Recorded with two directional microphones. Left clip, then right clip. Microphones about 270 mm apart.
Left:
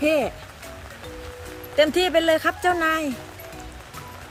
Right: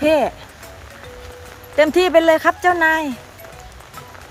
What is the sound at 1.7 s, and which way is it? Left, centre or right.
Speech, centre.